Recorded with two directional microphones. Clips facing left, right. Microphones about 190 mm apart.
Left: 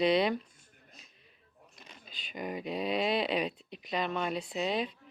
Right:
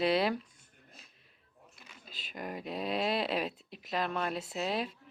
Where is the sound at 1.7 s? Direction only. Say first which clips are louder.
Left 4 dB; 35° left (ahead or behind).